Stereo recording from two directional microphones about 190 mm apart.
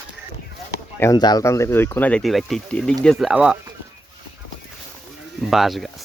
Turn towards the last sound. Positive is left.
turn(degrees=0)  # may be behind; listen again after turning